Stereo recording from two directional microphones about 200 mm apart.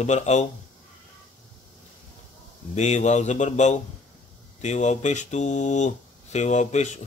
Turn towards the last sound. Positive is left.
turn(degrees=35)  # may be behind; listen again after turning